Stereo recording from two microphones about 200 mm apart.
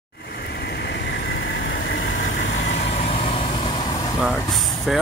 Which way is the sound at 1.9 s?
60° left (ahead or behind).